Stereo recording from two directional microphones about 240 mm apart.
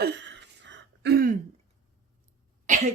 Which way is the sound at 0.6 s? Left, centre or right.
Right.